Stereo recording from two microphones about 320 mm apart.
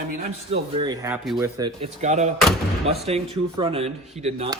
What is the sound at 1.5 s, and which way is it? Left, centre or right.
Speech, centre.